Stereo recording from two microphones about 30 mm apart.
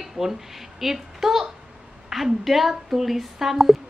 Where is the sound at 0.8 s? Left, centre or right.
Centre.